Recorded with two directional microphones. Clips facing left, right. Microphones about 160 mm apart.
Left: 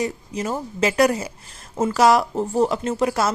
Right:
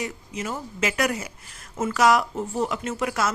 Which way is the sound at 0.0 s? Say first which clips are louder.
Left 6 dB; 35° left (ahead or behind).